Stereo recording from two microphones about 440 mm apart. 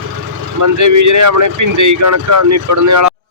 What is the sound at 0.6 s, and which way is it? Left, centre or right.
Speech, right.